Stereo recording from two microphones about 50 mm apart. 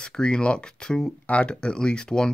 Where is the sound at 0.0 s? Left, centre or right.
Centre.